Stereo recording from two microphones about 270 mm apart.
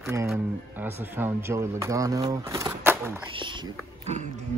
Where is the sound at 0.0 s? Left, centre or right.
Centre.